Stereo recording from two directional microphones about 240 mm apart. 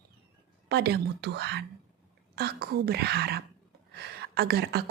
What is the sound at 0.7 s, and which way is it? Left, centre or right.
A woman's voice, right.